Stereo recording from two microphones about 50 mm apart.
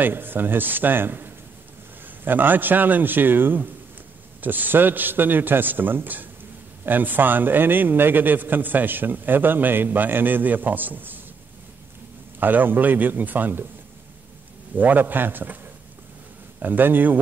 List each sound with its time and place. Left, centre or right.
0.0 s a man's voice: right
12.4 s a man's voice: right
14.8 s a man's voice: right
16.6 s a man's voice: right